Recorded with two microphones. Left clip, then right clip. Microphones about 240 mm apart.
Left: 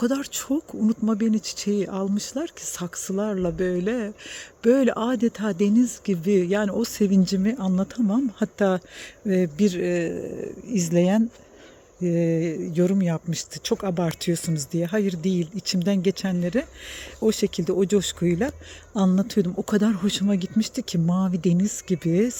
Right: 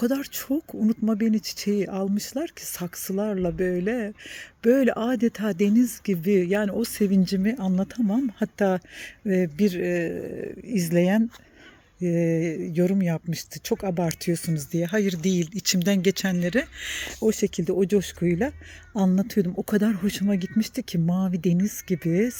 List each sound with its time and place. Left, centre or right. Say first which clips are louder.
0.0 s speech: left 1 dB; centre